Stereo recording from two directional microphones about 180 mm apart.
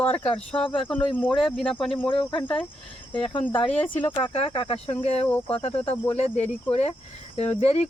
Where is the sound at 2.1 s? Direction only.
30° left (ahead or behind).